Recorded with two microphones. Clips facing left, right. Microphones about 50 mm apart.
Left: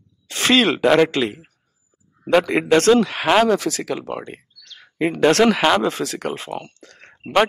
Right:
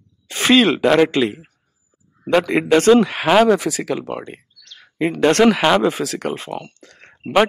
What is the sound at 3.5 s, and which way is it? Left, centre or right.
Speech, centre.